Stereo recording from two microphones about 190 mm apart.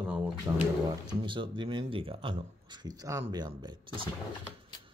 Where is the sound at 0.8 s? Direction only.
25° right (ahead or behind).